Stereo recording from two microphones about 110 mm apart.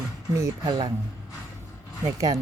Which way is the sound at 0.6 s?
45° right (ahead or behind).